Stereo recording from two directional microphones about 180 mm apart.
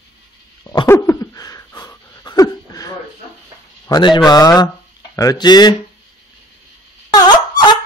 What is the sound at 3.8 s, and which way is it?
Speech, 25° left (ahead or behind).